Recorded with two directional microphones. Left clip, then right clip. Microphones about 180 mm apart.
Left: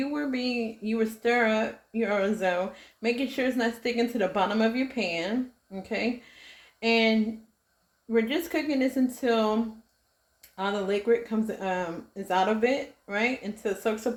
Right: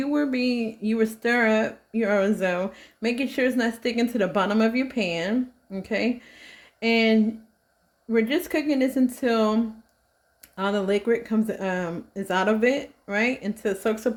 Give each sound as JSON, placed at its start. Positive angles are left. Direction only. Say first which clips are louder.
{"t": 0.0, "sound": "speech", "louder": "right 5 dB", "side_deg": -65}